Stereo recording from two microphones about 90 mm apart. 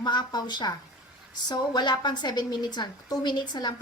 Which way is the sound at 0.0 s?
55° left (ahead or behind).